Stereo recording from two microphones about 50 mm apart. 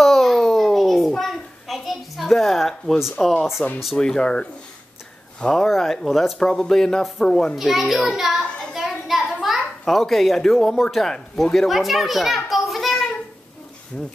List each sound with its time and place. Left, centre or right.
0.0 s a sound: centre
3.2 s a child's voice: centre
4.0 s speech: centre
5.5 s a child's voice: centre
7.5 s a child's voice: centre
8.7 s a sound: centre
11.5 s a child's voice: centre
13.9 s speech: centre